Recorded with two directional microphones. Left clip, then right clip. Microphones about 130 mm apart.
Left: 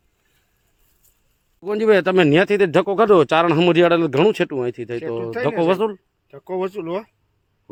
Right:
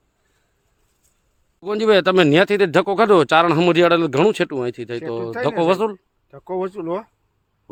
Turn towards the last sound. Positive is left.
turn(degrees=-10)  # may be behind; listen again after turning